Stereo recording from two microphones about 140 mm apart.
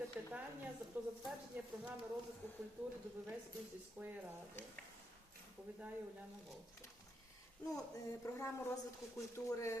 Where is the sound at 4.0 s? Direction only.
15° right (ahead or behind).